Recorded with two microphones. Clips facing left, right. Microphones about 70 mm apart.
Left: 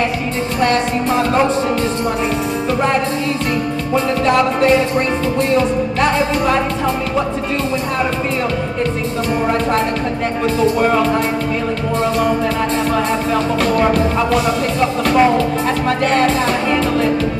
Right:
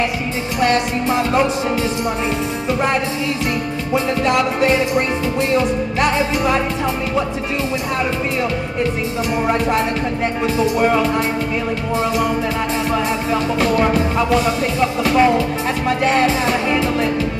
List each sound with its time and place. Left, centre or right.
3.9 s music: centre
10.6 s music: centre
13.9 s music: centre